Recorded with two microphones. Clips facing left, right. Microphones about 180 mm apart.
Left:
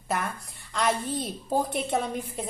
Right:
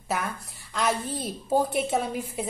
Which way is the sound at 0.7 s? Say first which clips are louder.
Even; centre (ahead or behind).